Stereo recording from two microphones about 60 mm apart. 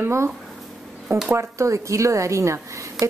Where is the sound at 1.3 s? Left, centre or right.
Right.